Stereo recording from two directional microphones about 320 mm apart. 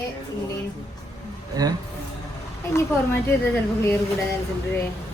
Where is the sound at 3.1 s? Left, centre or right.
Centre.